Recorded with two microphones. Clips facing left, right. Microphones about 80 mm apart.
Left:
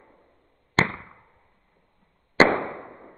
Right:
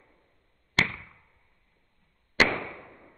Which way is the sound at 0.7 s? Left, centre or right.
Left.